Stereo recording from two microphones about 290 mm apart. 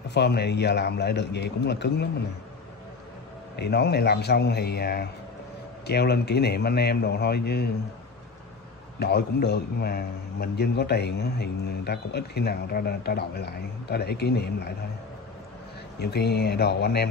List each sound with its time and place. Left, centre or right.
0.1 s a man's voice: left
3.5 s a man's voice: left
9.0 s a man's voice: left
16.0 s a man's voice: left